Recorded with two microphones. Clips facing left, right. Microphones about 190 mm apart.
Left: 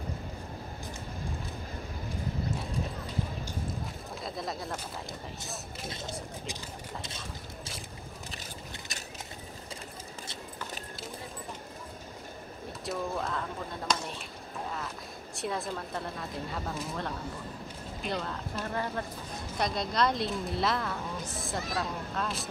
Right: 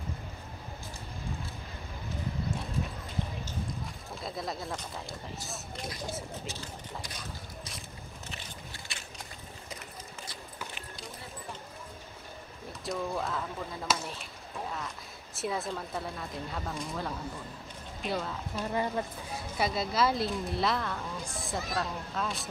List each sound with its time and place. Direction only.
4.2 s speech: centre (ahead or behind)
5.9 s speech: 25° left (ahead or behind)
8.9 s a sound: 40° left (ahead or behind)
12.8 s speech: centre (ahead or behind)
15.3 s speech: centre (ahead or behind)
18.7 s speech: 15° right (ahead or behind)
19.6 s speech: 5° right (ahead or behind)